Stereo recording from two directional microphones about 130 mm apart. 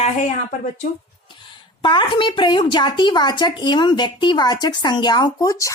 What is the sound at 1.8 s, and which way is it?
A woman's voice, 40° left (ahead or behind).